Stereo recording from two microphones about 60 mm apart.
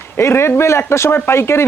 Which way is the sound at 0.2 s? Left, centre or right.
Left.